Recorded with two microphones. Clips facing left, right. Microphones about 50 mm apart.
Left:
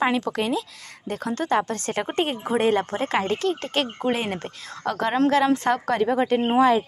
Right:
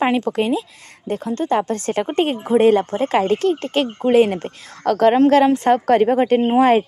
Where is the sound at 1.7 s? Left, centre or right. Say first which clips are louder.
Right 6 dB; left.